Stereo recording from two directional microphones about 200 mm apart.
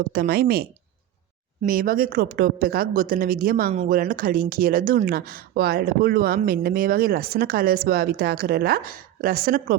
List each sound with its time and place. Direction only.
0.1 s speech: 50° right (ahead or behind)